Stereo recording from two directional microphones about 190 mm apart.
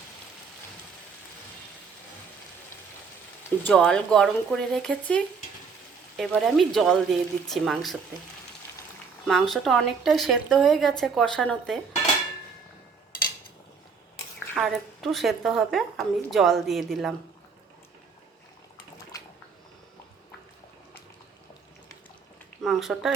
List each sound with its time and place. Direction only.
3.6 s a woman's voice: 5° left (ahead or behind)
9.2 s a woman's voice: centre (ahead or behind)
14.6 s a woman's voice: centre (ahead or behind)
22.6 s speech: centre (ahead or behind)